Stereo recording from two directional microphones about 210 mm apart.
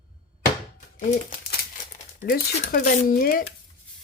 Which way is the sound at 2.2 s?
40° left (ahead or behind).